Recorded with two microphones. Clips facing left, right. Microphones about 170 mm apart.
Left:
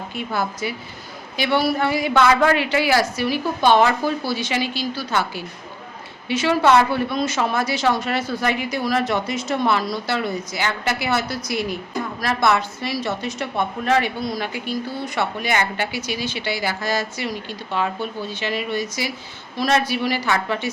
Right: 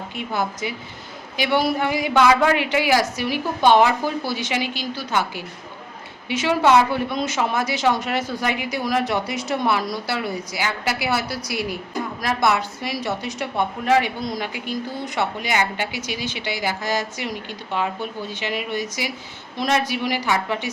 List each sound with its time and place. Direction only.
0.1 s a woman's voice: 20° right (ahead or behind)